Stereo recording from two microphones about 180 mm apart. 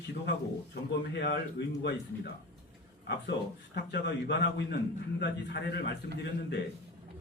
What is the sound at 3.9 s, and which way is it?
A man's voice, 70° left (ahead or behind).